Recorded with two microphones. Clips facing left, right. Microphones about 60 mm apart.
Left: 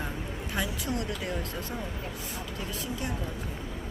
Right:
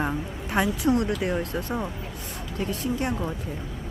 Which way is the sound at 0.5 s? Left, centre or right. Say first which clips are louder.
Right 10 dB; right.